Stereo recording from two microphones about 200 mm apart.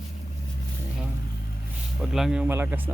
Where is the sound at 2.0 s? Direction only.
Centre (ahead or behind).